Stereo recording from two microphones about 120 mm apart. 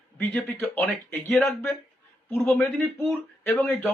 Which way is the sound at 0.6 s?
5° left (ahead or behind).